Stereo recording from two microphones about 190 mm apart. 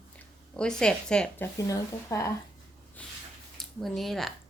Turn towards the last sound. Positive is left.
turn(degrees=0)  # may be behind; listen again after turning